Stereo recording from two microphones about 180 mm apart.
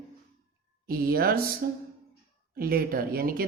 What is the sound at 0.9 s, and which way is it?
Speech, 55° right (ahead or behind).